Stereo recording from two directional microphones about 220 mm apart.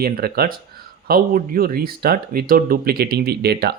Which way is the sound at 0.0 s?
45° right (ahead or behind).